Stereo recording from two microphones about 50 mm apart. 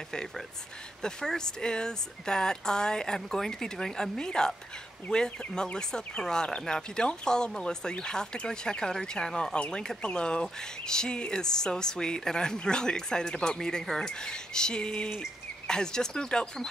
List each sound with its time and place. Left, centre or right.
1.0 s speech: centre